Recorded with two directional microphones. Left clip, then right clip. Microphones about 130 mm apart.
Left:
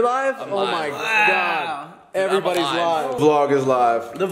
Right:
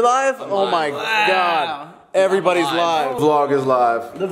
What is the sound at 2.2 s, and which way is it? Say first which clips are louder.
Speech: right 4 dB; 25° right (ahead or behind).